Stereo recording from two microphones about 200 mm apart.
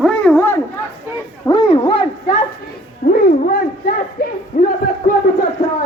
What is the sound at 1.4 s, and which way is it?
Speech, 25° left (ahead or behind).